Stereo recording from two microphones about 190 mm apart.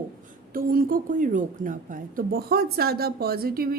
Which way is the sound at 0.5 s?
50° right (ahead or behind).